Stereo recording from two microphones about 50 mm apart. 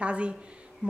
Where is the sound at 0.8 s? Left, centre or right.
Right.